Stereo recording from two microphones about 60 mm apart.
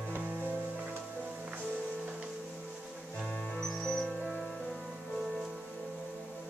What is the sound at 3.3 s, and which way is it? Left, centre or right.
Music, centre.